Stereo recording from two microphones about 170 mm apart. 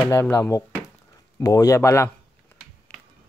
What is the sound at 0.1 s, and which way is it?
Speech, 20° left (ahead or behind).